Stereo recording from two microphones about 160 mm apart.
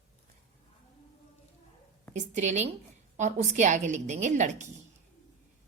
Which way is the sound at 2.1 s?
50° right (ahead or behind).